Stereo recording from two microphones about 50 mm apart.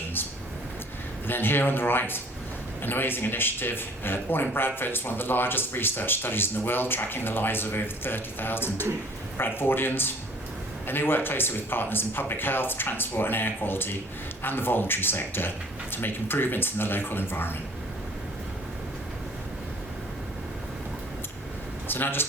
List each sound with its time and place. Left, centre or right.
1.3 s speech: left
21.8 s speech: left